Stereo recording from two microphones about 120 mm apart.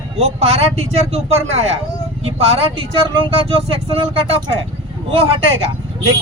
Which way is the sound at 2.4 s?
45° right (ahead or behind).